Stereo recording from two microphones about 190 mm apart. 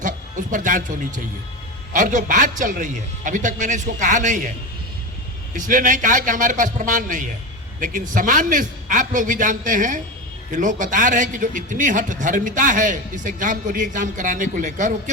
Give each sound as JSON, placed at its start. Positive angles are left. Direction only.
{"t": 0.0, "sound": "a man's voice", "side_deg": -40}
{"t": 5.5, "sound": "a man's voice", "side_deg": -45}